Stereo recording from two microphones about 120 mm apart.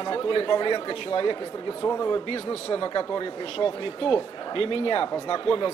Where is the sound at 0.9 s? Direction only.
50° left (ahead or behind).